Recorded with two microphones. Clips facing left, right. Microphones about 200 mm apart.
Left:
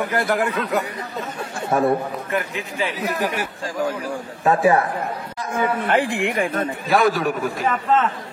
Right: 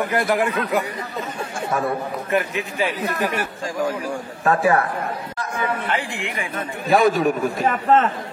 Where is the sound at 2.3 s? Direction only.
15° right (ahead or behind).